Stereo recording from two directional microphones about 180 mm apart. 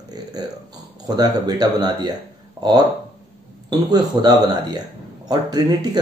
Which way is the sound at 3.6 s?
20° right (ahead or behind).